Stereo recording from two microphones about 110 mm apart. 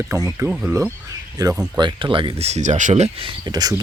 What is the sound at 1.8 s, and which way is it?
Speech, 45° right (ahead or behind).